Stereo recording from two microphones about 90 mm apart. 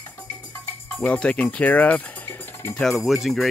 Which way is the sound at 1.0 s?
10° left (ahead or behind).